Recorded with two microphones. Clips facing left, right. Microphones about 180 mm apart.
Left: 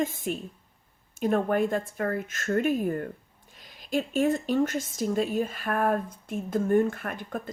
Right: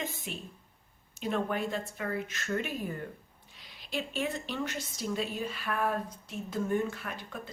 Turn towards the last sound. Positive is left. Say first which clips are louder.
# left 7 dB
turn(degrees=50)  # may be behind; listen again after turning